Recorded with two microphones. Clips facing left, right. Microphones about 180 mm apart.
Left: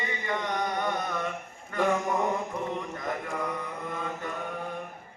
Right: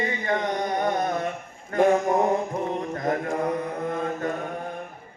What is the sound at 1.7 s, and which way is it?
Mantra, 45° right (ahead or behind).